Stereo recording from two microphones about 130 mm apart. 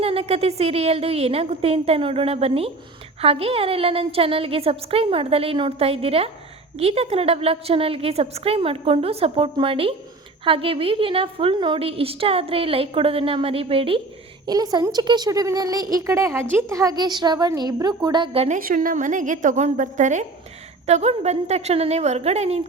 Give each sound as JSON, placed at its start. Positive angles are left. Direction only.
{"t": 0.0, "sound": "a woman's voice", "side_deg": -50}
{"t": 14.4, "sound": "a woman's voice", "side_deg": -30}
{"t": 18.3, "sound": "a woman's voice", "side_deg": -70}
{"t": 20.8, "sound": "a woman's voice", "side_deg": -60}